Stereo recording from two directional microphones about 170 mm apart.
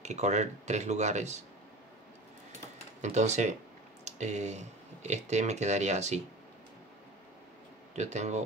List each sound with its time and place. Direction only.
0.0 s speech: 40° right (ahead or behind)
3.0 s speech: 45° right (ahead or behind)
7.9 s speech: 40° right (ahead or behind)